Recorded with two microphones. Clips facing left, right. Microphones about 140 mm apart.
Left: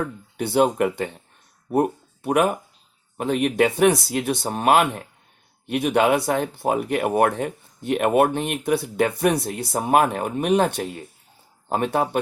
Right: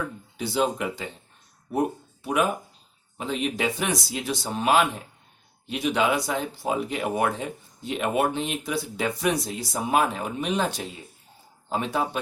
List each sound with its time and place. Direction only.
0.3 s speech: 60° left (ahead or behind)